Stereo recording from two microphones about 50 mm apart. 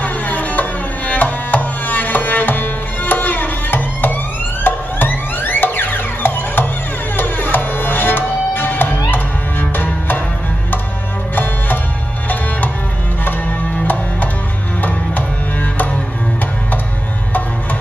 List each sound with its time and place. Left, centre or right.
0.0 s music: left
13.2 s music: left